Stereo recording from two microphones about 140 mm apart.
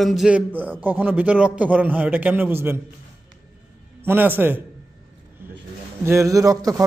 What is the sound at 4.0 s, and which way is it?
Speech, 15° right (ahead or behind).